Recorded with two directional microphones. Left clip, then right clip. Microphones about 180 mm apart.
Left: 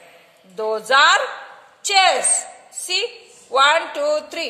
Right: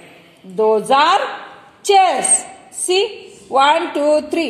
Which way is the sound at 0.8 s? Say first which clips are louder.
Right 1 dB; centre (ahead or behind).